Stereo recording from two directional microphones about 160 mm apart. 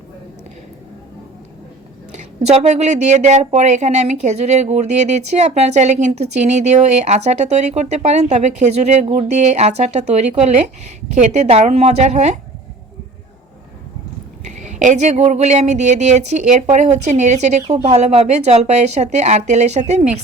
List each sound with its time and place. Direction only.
2.5 s speech: 45° right (ahead or behind)
14.4 s speech: 45° right (ahead or behind)